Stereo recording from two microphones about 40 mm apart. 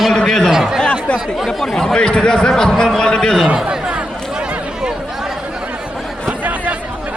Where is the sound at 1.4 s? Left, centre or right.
Centre.